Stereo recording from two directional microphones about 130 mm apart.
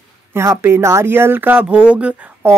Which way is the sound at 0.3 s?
20° right (ahead or behind).